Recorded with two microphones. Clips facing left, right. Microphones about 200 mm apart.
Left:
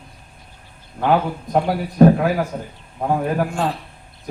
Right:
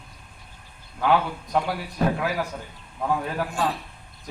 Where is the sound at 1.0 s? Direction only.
45° left (ahead or behind).